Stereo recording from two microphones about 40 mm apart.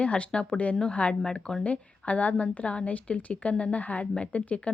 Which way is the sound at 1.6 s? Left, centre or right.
Left.